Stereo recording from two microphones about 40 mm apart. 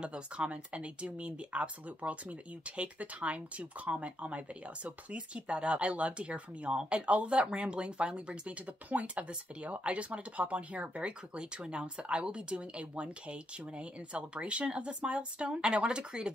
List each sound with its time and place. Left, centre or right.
0.0 s speech: right